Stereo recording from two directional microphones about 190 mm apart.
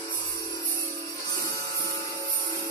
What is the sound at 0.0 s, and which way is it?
Music, 15° left (ahead or behind).